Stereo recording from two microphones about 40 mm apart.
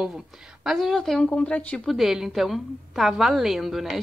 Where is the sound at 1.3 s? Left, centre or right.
Left.